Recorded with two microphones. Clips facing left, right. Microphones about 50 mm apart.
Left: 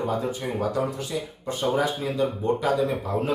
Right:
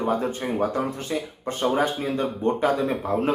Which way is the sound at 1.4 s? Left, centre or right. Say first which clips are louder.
Right 1 dB; right.